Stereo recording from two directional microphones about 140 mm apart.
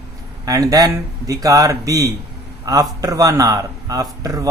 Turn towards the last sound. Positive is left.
turn(degrees=-25)  # may be behind; listen again after turning